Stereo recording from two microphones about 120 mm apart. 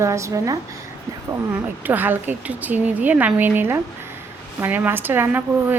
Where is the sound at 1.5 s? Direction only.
15° right (ahead or behind).